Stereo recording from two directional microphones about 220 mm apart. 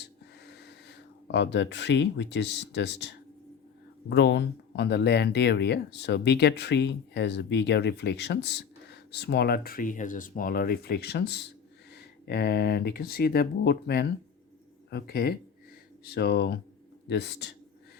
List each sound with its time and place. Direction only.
0.0 s gasp: 50° left (ahead or behind)
4.1 s speech: 50° left (ahead or behind)